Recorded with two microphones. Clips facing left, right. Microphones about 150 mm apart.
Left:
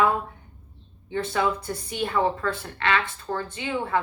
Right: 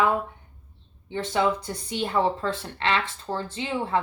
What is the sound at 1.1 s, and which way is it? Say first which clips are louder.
A woman's voice: right 1 dB; 20° right (ahead or behind).